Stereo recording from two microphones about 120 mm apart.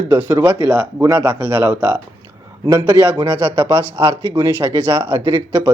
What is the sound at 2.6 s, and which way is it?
Speech, 30° right (ahead or behind).